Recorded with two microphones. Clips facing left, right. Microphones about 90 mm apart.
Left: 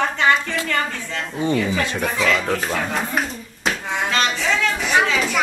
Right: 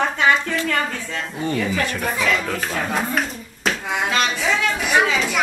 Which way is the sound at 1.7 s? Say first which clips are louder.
Even; 20° left (ahead or behind).